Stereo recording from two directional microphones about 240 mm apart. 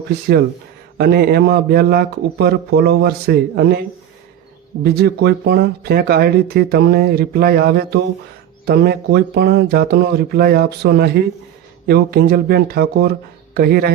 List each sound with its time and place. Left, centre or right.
0.9 s speech: right